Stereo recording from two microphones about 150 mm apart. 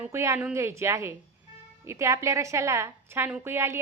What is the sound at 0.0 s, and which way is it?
A woman's voice, 20° right (ahead or behind).